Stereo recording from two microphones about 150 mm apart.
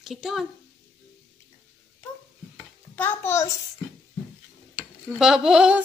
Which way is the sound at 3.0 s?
15° left (ahead or behind).